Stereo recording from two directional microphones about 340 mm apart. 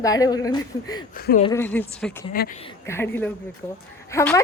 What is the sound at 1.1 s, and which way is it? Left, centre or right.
Speech, left.